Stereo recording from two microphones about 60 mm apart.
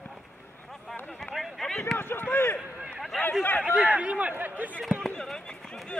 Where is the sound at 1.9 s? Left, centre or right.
Left.